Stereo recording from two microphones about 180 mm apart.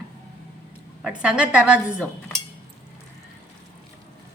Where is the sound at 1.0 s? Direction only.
5° right (ahead or behind).